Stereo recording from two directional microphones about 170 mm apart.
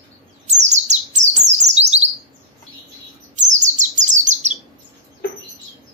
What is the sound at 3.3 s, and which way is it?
Bird, 45° right (ahead or behind).